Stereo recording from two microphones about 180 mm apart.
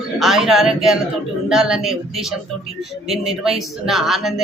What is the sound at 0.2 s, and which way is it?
A man's voice, centre (ahead or behind).